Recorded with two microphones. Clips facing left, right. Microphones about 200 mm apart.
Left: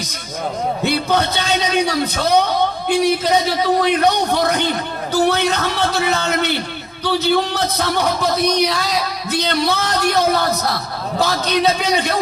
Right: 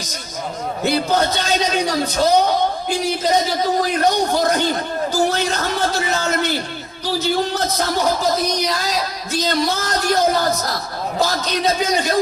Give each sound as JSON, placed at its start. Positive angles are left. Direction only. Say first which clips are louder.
{"t": 0.9, "sound": "a man's voice", "louder": "right 2 dB", "side_deg": 65}